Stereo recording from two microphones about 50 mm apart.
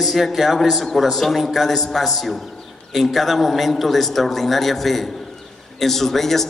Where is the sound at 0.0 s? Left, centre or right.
Centre.